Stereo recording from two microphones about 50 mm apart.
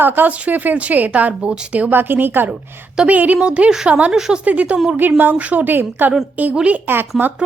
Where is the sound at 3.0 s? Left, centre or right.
Right.